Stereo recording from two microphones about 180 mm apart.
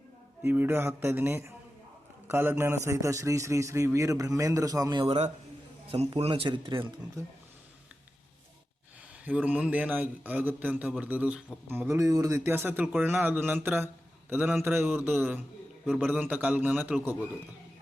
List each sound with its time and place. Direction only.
0.4 s a man's voice: 10° right (ahead or behind)
5.0 s speech: 35° right (ahead or behind)
7.2 s a man's voice: 15° right (ahead or behind)
9.2 s a man's voice: 10° right (ahead or behind)